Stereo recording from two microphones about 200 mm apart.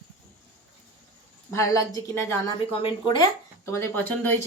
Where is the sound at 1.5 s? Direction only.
15° left (ahead or behind).